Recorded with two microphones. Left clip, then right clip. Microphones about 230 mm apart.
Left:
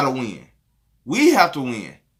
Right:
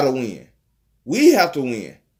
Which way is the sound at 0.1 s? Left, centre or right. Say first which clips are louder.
Right 3 dB; centre.